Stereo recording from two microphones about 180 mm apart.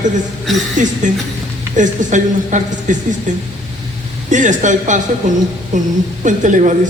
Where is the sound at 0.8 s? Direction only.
45° right (ahead or behind).